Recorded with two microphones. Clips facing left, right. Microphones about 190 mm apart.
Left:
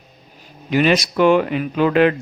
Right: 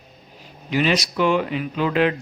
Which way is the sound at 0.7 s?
55° left (ahead or behind).